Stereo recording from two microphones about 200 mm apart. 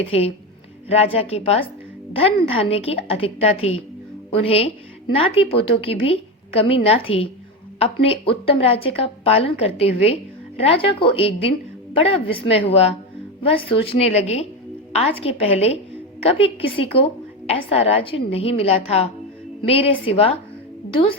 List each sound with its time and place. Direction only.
0.1 s a woman's voice: 30° left (ahead or behind)